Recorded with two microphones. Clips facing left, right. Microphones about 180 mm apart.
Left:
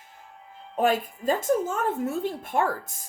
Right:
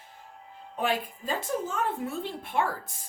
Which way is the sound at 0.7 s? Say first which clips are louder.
Left 6 dB; 45° left (ahead or behind).